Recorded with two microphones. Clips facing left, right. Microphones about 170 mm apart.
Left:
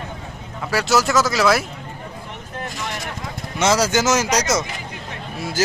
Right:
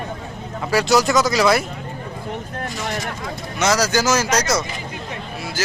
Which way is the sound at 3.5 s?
25° left (ahead or behind).